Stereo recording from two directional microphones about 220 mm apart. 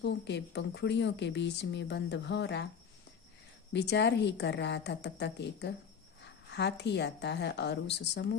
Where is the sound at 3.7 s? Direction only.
50° left (ahead or behind).